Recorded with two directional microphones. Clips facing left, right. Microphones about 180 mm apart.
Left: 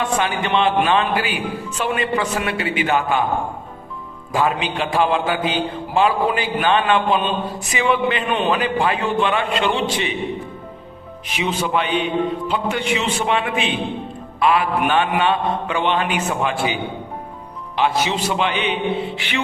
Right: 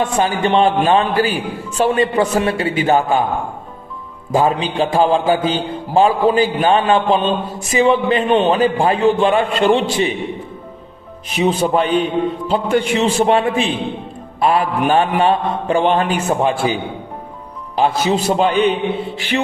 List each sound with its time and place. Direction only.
0.2 s a man's voice: 35° right (ahead or behind)
4.3 s a man's voice: 35° right (ahead or behind)
8.6 s a man's voice: 40° right (ahead or behind)
11.3 s a man's voice: 40° right (ahead or behind)
17.7 s a man's voice: 40° right (ahead or behind)